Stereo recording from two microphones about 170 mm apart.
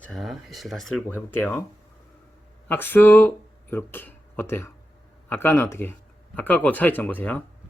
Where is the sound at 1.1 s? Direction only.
10° left (ahead or behind).